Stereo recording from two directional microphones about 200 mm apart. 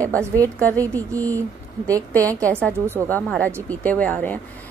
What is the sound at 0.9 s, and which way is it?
A woman's voice, 10° left (ahead or behind).